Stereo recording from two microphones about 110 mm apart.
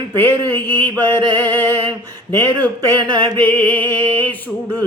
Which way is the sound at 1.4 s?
40° right (ahead or behind).